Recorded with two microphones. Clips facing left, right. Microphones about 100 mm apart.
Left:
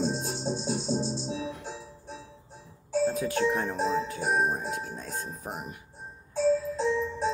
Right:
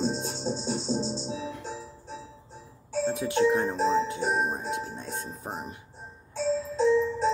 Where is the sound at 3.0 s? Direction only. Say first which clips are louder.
Right 3 dB; 25° right (ahead or behind).